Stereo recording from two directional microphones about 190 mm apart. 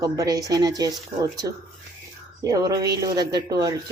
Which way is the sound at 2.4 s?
20° right (ahead or behind).